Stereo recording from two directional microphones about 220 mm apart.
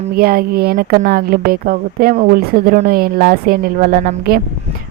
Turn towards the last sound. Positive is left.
turn(degrees=-40)  # may be behind; listen again after turning